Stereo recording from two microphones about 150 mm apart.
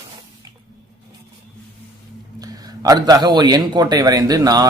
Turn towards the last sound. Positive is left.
turn(degrees=-25)  # may be behind; listen again after turning